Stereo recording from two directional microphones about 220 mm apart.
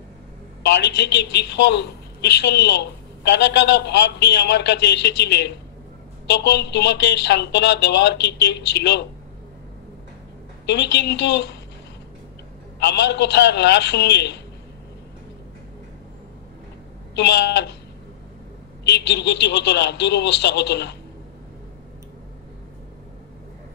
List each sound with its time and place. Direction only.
0.7 s a woman's voice: 50° left (ahead or behind)
10.7 s a woman's voice: 50° left (ahead or behind)
12.7 s a woman's voice: 50° left (ahead or behind)
17.2 s a woman's voice: 50° left (ahead or behind)
18.9 s a woman's voice: 50° left (ahead or behind)